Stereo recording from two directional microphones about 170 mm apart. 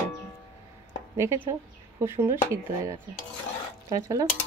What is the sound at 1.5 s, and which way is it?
Speech, 15° right (ahead or behind).